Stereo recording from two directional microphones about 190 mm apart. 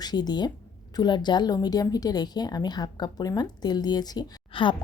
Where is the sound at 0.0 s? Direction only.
20° left (ahead or behind).